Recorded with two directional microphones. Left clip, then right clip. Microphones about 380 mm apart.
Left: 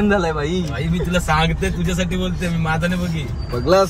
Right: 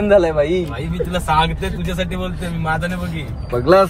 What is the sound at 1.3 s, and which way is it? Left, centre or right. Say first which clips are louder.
Speech: right 4 dB; right.